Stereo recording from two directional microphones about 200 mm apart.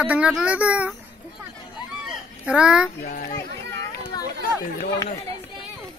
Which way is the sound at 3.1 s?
40° left (ahead or behind).